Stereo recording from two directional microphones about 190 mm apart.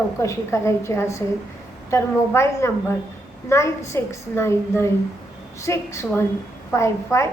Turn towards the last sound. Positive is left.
turn(degrees=15)  # may be behind; listen again after turning